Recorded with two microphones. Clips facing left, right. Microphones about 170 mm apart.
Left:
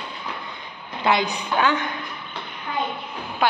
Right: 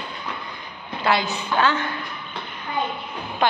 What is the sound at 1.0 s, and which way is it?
Speech, 20° left (ahead or behind).